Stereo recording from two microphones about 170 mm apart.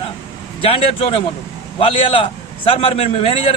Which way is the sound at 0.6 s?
35° left (ahead or behind).